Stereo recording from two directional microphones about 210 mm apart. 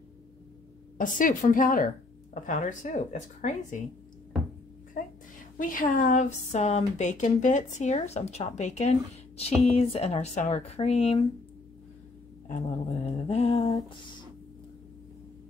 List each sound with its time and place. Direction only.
0.9 s a woman's voice: 40° left (ahead or behind)
5.6 s a woman's voice: 40° left (ahead or behind)
12.4 s a woman's voice: 35° left (ahead or behind)